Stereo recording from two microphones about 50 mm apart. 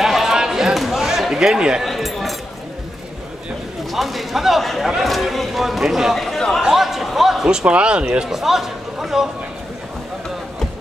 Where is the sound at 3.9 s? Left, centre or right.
Centre.